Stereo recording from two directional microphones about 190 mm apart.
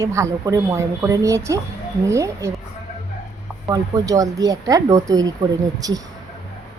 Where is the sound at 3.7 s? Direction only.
20° right (ahead or behind).